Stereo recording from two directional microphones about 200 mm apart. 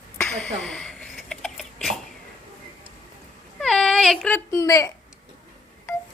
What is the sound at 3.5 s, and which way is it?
Baby cry, 5° left (ahead or behind).